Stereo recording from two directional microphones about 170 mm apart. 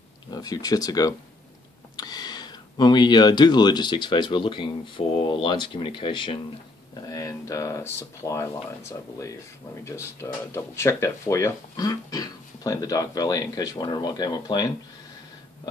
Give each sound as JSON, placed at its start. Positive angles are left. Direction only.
{"t": 0.3, "sound": "speech", "side_deg": 25}
{"t": 7.1, "sound": "speech", "side_deg": 20}